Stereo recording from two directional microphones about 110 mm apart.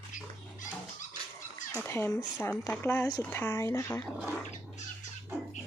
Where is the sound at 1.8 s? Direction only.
25° left (ahead or behind).